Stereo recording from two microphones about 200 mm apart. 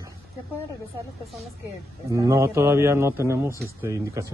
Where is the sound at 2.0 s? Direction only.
15° right (ahead or behind).